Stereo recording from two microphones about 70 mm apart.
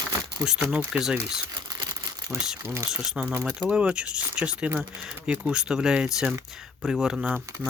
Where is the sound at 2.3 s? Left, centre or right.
Right.